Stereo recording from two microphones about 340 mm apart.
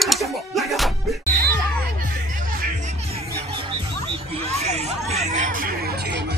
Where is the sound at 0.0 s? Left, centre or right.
Centre.